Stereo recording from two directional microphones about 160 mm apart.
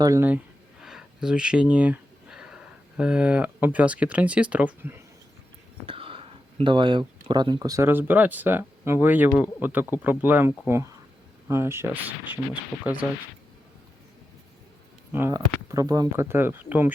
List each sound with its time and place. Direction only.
0.0 s speech: 15° right (ahead or behind)
0.8 s speech: 5° right (ahead or behind)
5.8 s speech: 35° right (ahead or behind); by 13.1 s 10° right (ahead or behind)
15.1 s speech: 15° right (ahead or behind)